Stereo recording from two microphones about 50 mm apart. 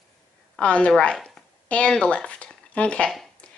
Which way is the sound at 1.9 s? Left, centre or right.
Left.